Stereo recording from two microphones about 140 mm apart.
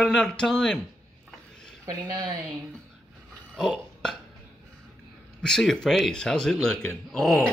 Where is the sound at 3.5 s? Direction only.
5° left (ahead or behind).